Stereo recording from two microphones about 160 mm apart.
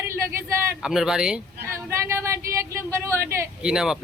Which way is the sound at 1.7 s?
15° right (ahead or behind).